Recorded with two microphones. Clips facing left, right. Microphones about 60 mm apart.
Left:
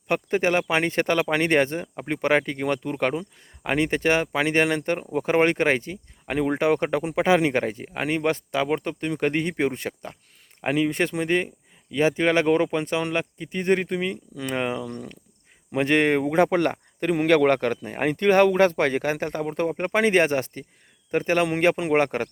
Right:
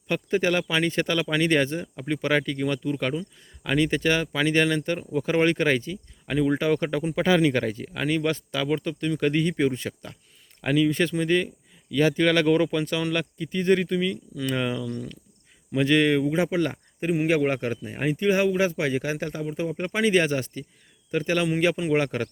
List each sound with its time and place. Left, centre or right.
0.1 s speech: left